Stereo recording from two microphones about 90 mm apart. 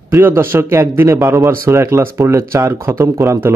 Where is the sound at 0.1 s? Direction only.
30° right (ahead or behind).